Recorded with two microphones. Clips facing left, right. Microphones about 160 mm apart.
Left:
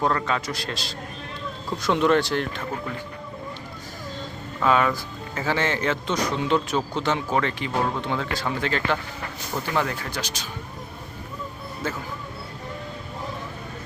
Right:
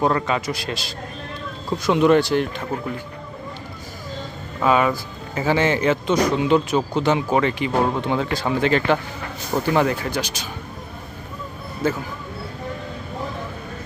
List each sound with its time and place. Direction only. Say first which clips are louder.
0.0 s speech: right 4 dB; 15° right (ahead or behind)
4.6 s speech: right 3 dB; 10° right (ahead or behind)
9.5 s speech: right 8 dB; 45° right (ahead or behind)
10.1 s speech: right 6 dB; 10° right (ahead or behind)